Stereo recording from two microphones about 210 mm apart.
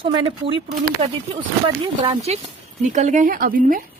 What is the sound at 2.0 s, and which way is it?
Speech, 30° right (ahead or behind).